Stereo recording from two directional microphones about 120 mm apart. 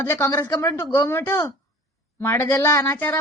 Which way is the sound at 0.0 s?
25° left (ahead or behind).